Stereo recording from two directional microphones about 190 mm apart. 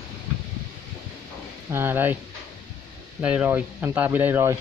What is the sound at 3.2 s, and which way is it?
Speech, 10° right (ahead or behind).